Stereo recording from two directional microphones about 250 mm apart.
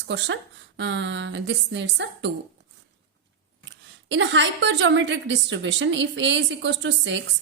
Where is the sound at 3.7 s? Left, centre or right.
Right.